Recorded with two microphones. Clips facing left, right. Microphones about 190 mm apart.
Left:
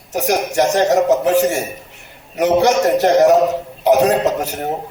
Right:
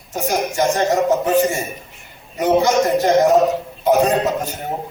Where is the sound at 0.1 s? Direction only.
75° left (ahead or behind).